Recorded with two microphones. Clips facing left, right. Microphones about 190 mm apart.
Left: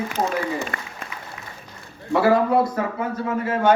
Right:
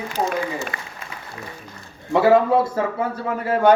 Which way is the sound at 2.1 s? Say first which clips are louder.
Right 2 dB; 20° right (ahead or behind).